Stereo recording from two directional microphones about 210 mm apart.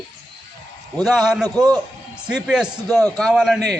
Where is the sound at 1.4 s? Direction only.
15° right (ahead or behind).